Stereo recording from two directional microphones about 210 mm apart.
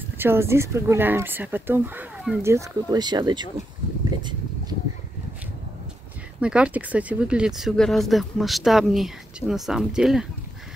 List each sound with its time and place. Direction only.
0.2 s speech: 10° right (ahead or behind)
4.2 s a sound: 20° right (ahead or behind)
6.4 s speech: 5° right (ahead or behind)